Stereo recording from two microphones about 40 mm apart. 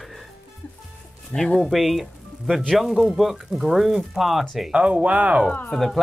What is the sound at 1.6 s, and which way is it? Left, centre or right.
Speech, centre.